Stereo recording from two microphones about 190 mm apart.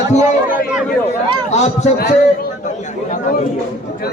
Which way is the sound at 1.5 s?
35° left (ahead or behind).